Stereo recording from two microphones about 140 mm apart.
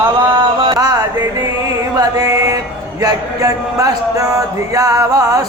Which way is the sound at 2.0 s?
25° right (ahead or behind).